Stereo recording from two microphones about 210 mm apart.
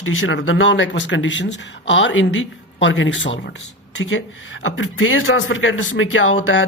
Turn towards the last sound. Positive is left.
turn(degrees=70)  # may be behind; listen again after turning